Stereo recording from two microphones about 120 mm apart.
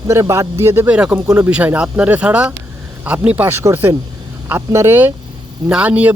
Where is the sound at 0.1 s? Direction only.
25° right (ahead or behind).